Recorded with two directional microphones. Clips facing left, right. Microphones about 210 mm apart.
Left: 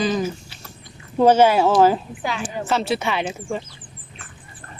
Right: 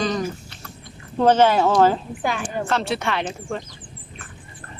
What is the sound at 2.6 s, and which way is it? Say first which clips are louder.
Speech: left 3 dB; 5° left (ahead or behind).